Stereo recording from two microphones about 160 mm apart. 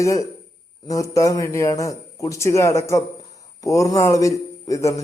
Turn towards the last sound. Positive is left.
turn(degrees=20)  # may be behind; listen again after turning